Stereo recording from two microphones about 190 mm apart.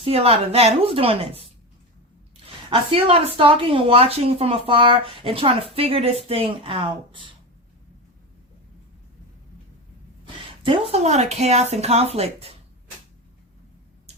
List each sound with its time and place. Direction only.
0.0 s speech: 30° right (ahead or behind)
2.6 s a woman's voice: 30° right (ahead or behind)
10.2 s speech: 25° right (ahead or behind)